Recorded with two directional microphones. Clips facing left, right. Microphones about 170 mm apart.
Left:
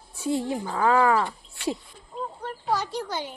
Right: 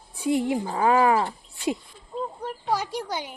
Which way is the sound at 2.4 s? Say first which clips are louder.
Left 1 dB; 10° right (ahead or behind).